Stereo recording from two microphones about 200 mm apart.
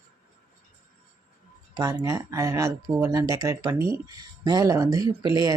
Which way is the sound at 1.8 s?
20° right (ahead or behind).